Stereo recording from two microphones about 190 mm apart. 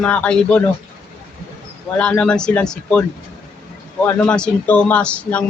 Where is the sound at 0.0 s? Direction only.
5° left (ahead or behind).